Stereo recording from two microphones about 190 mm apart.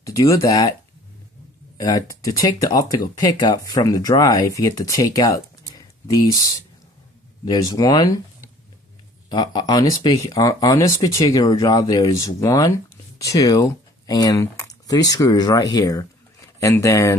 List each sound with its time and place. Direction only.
0.0 s speech: 15° left (ahead or behind)
1.8 s speech: 20° left (ahead or behind)
7.4 s speech: 20° left (ahead or behind)
9.3 s speech: 20° left (ahead or behind)